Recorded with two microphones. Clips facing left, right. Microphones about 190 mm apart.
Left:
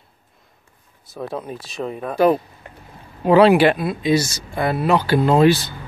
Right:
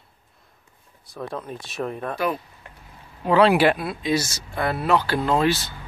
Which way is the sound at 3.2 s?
10° left (ahead or behind).